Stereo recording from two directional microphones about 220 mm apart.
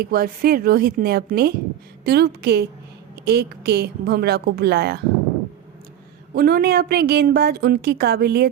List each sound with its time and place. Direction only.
0.0 s a woman's voice: 45° right (ahead or behind)
6.3 s a woman's voice: 45° right (ahead or behind)